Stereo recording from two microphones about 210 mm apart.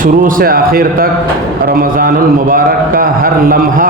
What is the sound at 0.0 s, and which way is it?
A man's voice, 40° right (ahead or behind).